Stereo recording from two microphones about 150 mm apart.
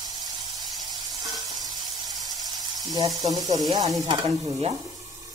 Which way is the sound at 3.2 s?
25° right (ahead or behind).